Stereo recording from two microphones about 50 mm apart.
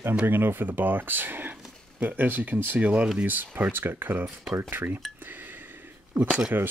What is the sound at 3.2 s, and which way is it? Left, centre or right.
Speech, right.